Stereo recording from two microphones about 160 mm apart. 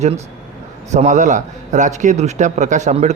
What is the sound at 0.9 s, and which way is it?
A man's voice, 50° right (ahead or behind).